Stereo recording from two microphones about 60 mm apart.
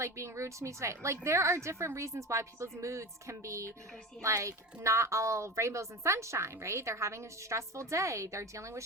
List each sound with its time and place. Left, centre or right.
0.0 s a woman's voice: right